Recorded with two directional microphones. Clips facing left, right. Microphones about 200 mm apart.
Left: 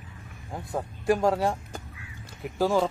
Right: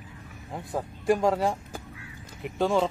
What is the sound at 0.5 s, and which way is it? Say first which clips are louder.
Speech: even; centre (ahead or behind).